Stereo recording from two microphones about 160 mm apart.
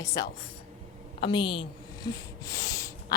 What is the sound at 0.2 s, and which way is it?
A woman's voice, 25° left (ahead or behind).